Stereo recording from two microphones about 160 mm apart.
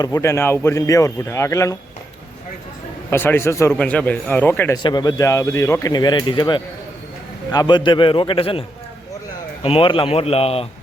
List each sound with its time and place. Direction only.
0.0 s speech: 20° left (ahead or behind)
3.1 s speech: 15° left (ahead or behind)
4.8 s a man's voice: 25° left (ahead or behind)
9.6 s a man's voice: 35° left (ahead or behind)